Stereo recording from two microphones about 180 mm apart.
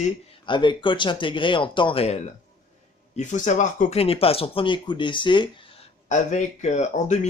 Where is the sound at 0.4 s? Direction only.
25° left (ahead or behind).